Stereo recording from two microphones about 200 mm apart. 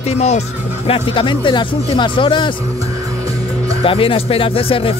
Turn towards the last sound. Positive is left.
turn(degrees=25)  # may be behind; listen again after turning